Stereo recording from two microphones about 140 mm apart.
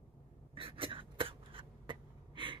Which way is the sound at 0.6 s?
40° right (ahead or behind).